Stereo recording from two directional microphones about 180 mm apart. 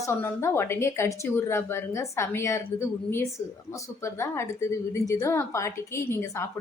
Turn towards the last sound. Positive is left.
turn(degrees=15)  # may be behind; listen again after turning